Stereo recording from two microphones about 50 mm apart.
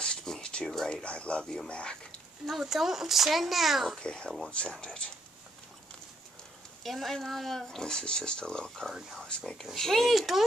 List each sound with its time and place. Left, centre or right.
0.0 s a sound: centre
1.7 s speech: left
2.4 s speech: centre
4.0 s speech: centre
6.8 s speech: centre